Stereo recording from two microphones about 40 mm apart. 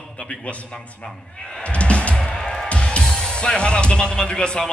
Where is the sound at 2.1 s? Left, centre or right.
Centre.